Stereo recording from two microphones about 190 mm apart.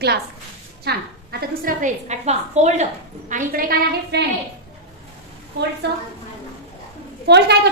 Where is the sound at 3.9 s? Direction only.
65° right (ahead or behind).